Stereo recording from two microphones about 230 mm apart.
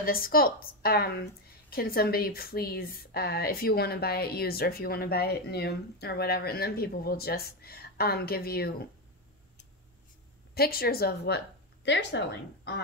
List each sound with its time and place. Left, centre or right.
0.0 s a woman's voice: left
10.5 s speech: left